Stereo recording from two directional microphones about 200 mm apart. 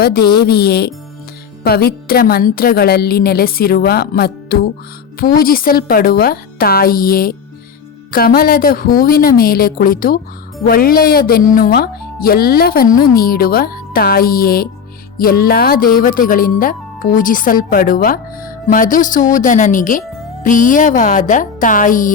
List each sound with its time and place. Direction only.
0.0 s speech: 50° left (ahead or behind)